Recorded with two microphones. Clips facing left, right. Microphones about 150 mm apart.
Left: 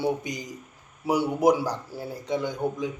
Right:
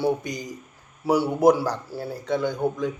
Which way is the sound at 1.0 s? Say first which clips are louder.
Right 3 dB; 20° left (ahead or behind).